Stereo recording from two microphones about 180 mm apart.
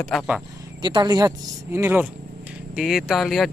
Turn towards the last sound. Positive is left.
turn(degrees=0)  # may be behind; listen again after turning